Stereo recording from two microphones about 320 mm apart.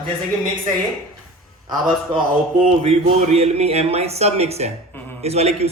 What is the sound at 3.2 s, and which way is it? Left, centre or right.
Speech, centre.